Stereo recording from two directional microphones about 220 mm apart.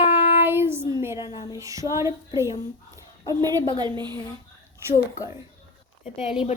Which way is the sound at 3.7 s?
20° right (ahead or behind).